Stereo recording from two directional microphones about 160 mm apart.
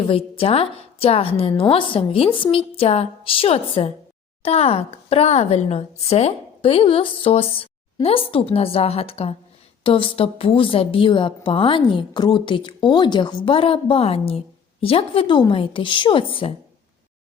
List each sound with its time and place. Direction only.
0.0 s a woman's voice: 35° left (ahead or behind)